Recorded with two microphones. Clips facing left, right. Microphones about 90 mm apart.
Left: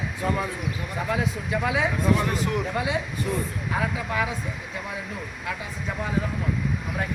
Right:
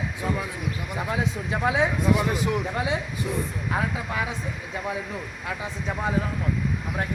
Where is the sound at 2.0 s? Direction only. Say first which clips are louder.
Even; 15° right (ahead or behind).